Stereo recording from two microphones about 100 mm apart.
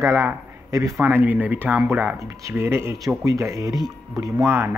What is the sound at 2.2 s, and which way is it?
Speech, 30° right (ahead or behind).